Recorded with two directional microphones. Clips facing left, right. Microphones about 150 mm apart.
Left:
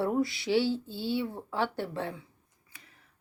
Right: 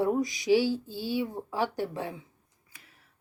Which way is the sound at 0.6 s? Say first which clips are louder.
Right 1 dB; 25° left (ahead or behind).